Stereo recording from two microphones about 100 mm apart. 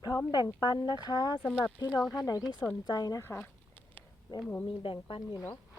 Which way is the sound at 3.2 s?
20° left (ahead or behind).